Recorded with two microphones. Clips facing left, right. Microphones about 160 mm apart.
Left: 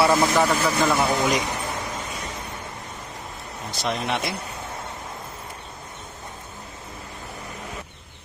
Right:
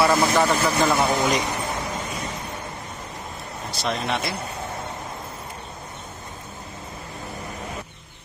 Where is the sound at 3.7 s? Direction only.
15° left (ahead or behind).